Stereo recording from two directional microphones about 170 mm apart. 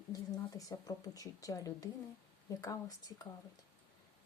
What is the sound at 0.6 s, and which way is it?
Speech, 20° left (ahead or behind).